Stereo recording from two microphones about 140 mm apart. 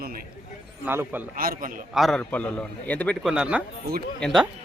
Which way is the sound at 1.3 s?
90° right.